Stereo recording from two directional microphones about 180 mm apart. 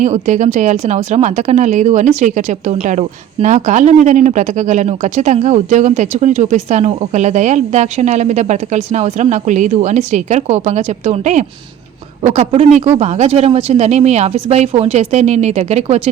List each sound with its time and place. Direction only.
0.0 s speech: 40° right (ahead or behind)